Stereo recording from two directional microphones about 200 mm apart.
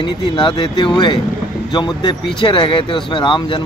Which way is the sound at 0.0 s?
25° left (ahead or behind).